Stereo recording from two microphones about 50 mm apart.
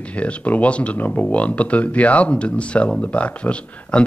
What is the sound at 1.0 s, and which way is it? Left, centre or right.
Speech, left.